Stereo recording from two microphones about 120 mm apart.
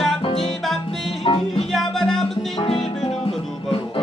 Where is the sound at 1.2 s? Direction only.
55° left (ahead or behind).